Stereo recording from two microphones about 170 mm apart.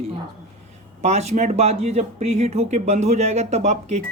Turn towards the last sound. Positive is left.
turn(degrees=-45)  # may be behind; listen again after turning